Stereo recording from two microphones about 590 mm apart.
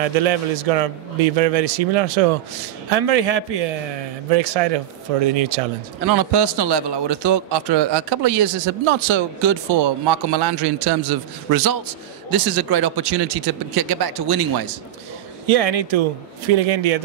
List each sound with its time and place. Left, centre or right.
0.0 s a man's voice: right
4.3 s a man's voice: right
6.1 s a man's voice: right
15.4 s a man's voice: right
16.4 s a man's voice: right